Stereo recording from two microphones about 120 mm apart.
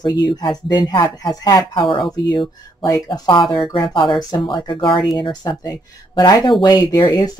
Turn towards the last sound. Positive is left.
turn(degrees=35)  # may be behind; listen again after turning